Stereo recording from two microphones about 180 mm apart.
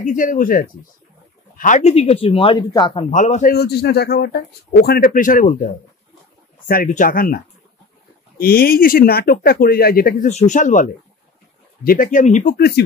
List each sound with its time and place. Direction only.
0.0 s speech: 45° left (ahead or behind); by 3.1 s 25° left (ahead or behind)
3.1 s speech: 40° left (ahead or behind)
3.5 s speech: 65° left (ahead or behind); by 5.7 s 50° left (ahead or behind)
6.7 s speech: 50° left (ahead or behind)
8.4 s speech: 55° left (ahead or behind)
10.3 s speech: 45° left (ahead or behind); by 12.8 s 60° left (ahead or behind)